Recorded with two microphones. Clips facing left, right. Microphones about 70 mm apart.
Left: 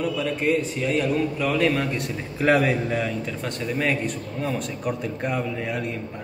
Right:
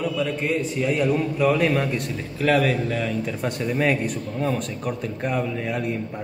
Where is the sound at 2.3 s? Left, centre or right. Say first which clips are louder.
Even; centre.